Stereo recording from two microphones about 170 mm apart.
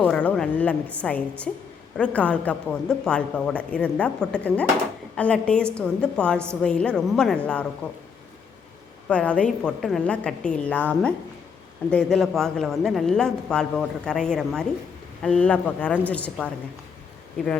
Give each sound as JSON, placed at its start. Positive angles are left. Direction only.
{"t": 0.0, "sound": "a woman's voice", "side_deg": 10}
{"t": 9.0, "sound": "a woman's voice", "side_deg": 5}